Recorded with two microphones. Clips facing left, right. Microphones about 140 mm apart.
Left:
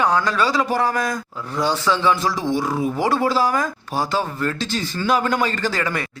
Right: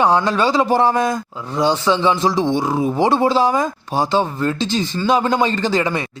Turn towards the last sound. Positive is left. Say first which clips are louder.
# right 5 dB
turn(degrees=-25)  # may be behind; listen again after turning